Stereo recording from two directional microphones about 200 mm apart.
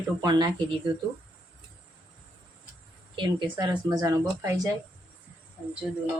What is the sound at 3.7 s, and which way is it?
Speech, 15° right (ahead or behind).